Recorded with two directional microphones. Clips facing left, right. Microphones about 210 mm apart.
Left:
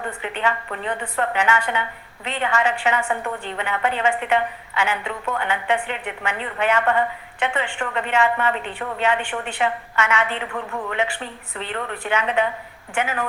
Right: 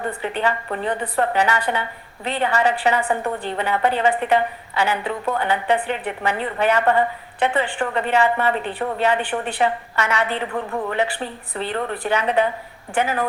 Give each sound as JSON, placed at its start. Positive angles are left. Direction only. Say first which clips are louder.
{"t": 0.0, "sound": "a woman's voice", "louder": "right 2 dB", "side_deg": -35}